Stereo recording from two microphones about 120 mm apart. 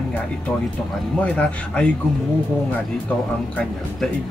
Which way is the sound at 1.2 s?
10° left (ahead or behind).